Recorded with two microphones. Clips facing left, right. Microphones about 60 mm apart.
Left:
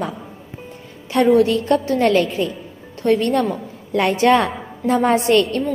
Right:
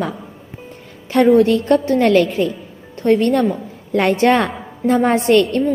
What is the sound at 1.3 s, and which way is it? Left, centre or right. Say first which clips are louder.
A woman's voice: right 2 dB; right.